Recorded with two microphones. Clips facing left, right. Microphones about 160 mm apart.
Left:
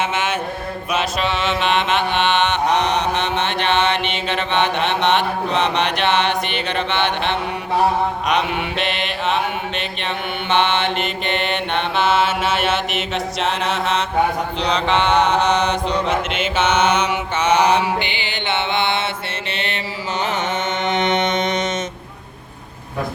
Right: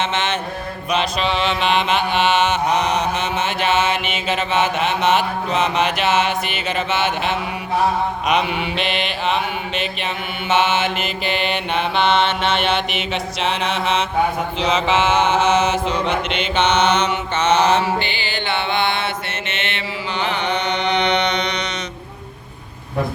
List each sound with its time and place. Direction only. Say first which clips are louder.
0.0 s mantra: even; 10° left (ahead or behind)
19.5 s mantra: left 2 dB; 35° left (ahead or behind)